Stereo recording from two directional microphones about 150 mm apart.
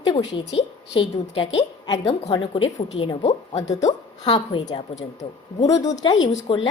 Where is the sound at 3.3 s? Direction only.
50° left (ahead or behind).